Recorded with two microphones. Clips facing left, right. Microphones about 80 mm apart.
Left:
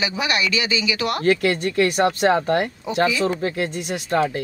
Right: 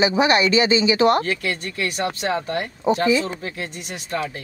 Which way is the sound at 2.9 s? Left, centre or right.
Right.